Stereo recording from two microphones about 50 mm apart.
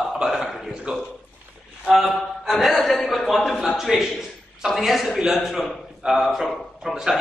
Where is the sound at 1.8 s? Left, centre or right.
Centre.